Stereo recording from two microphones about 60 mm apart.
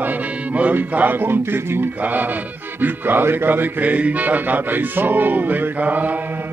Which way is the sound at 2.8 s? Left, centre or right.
Right.